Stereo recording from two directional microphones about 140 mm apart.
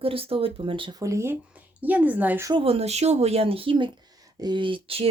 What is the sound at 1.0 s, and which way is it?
A woman's voice, 20° right (ahead or behind).